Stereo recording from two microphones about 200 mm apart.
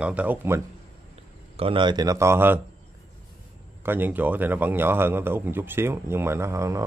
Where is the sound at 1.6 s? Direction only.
25° right (ahead or behind).